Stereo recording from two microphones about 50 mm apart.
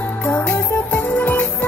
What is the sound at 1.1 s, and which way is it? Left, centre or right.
Music, left.